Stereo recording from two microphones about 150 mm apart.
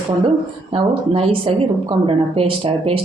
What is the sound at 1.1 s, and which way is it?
Speech, 40° right (ahead or behind).